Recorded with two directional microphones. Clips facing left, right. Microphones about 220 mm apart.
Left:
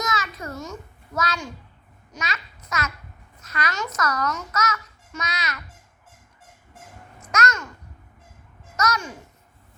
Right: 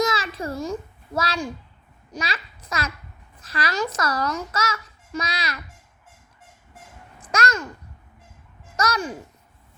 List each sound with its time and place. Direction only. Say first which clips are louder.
0.0 s a sound: right 5 dB; 30° right (ahead or behind)
2.1 s a child's voice: right 3 dB; 30° right (ahead or behind)
7.3 s babbling: right 1 dB; 30° right (ahead or behind)
8.7 s a child's voice: right 1 dB; 30° right (ahead or behind)